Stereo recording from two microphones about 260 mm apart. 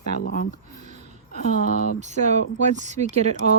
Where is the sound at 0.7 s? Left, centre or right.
Right.